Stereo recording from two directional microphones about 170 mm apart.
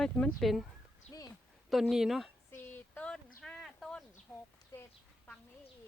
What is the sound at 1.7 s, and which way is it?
Speech, centre (ahead or behind).